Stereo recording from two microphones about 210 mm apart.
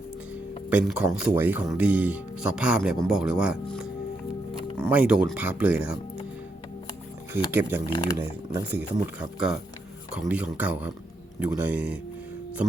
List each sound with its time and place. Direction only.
0.7 s speech: 5° right (ahead or behind)
7.3 s speech: 10° right (ahead or behind)
7.9 s speech: 20° left (ahead or behind)
8.1 s speech: 10° right (ahead or behind)